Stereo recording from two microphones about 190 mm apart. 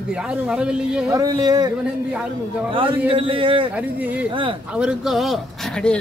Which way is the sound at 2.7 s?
25° right (ahead or behind).